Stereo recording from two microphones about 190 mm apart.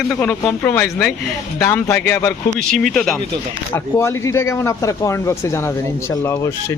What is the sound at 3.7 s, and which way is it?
Speech, 15° left (ahead or behind).